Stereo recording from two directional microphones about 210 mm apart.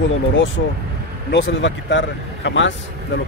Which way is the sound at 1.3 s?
60° left (ahead or behind).